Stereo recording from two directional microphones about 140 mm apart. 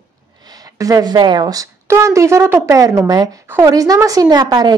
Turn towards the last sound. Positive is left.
turn(degrees=-30)  # may be behind; listen again after turning